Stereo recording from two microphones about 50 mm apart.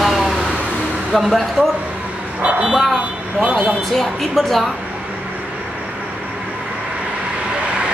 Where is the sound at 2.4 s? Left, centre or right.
Right.